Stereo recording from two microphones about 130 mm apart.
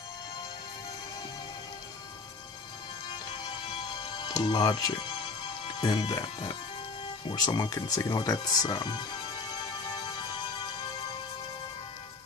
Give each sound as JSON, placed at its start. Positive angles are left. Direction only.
{"t": 4.2, "sound": "speech", "side_deg": 30}